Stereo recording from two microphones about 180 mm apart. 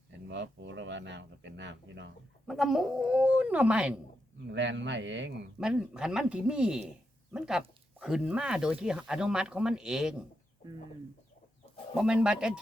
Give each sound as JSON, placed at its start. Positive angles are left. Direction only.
{"t": 0.3, "sound": "speech", "side_deg": -80}
{"t": 2.5, "sound": "speech", "side_deg": 0}
{"t": 4.4, "sound": "speech", "side_deg": -80}
{"t": 5.5, "sound": "speech", "side_deg": -5}
{"t": 11.9, "sound": "speech", "side_deg": -5}